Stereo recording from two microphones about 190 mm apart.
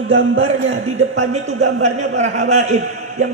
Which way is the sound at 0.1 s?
80° right.